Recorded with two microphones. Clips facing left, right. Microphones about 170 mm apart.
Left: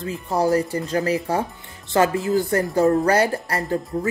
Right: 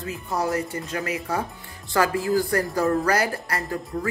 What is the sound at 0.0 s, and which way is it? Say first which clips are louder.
A woman's voice: left 5 dB; 30° left (ahead or behind).